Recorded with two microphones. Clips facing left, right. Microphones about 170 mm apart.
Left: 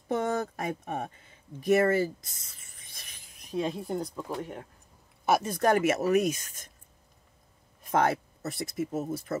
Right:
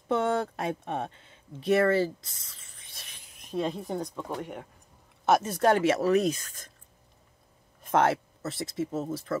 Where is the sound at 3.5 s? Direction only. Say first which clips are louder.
Even; centre (ahead or behind).